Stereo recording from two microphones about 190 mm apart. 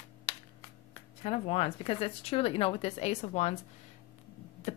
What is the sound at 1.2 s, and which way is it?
A woman's voice, 30° left (ahead or behind).